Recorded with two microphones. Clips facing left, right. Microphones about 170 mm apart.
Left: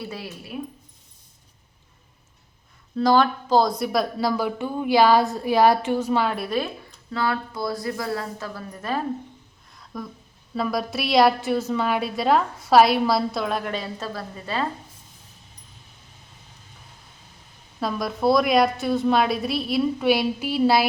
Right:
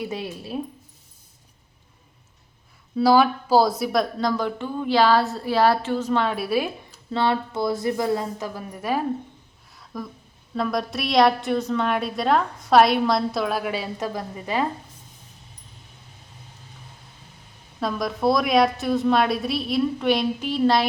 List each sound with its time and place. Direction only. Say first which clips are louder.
0.0 s a woman's voice: right 4 dB; 20° right (ahead or behind)
2.9 s a woman's voice: right 2 dB; 10° right (ahead or behind)
7.1 s a woman's voice: right 3 dB; 25° right (ahead or behind)
9.7 s a sound: right 1 dB; centre (ahead or behind)
10.5 s a woman's voice: even; 5° left (ahead or behind); by 14.7 s 15° right (ahead or behind)
17.7 s a woman's voice: right 1 dB; centre (ahead or behind)